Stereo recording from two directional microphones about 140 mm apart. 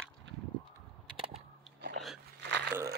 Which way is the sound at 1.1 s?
40° right (ahead or behind).